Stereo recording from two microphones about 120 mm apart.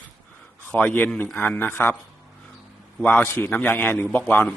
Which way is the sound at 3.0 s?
15° left (ahead or behind).